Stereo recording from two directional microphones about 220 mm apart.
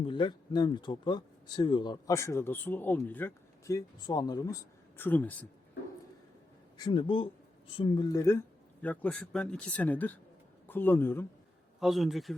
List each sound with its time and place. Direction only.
0.0 s speech: 20° left (ahead or behind)
6.7 s speech: 20° left (ahead or behind)
11.8 s speech: centre (ahead or behind)